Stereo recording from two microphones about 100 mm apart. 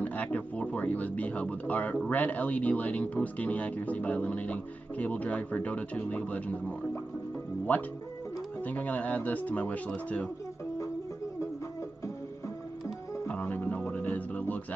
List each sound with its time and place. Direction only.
0.0 s speech: 15° left (ahead or behind)
8.6 s speech: 15° left (ahead or behind)
13.3 s music: 15° left (ahead or behind)